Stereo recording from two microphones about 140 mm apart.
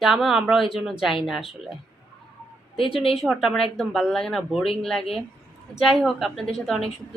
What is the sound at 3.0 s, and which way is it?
Speech, 45° left (ahead or behind).